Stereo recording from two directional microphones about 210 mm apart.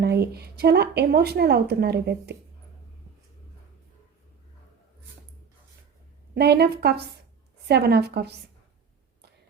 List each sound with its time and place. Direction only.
0.0 s speech: 50° right (ahead or behind)
6.3 s speech: 50° right (ahead or behind)